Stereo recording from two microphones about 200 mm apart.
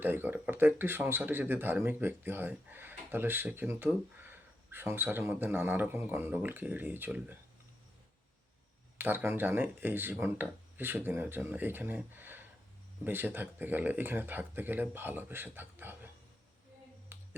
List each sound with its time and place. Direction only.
0.0 s speech: 10° right (ahead or behind)
9.0 s speech: 10° right (ahead or behind)
17.1 s finger snapping: 10° right (ahead or behind)